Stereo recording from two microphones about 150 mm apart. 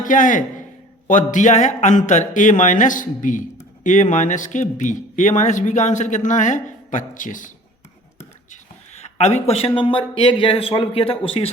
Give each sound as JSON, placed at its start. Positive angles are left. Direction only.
{"t": 0.0, "sound": "a man's voice", "side_deg": 60}
{"t": 8.4, "sound": "speech", "side_deg": 50}